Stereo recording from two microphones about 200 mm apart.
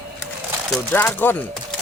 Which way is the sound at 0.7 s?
5° left (ahead or behind).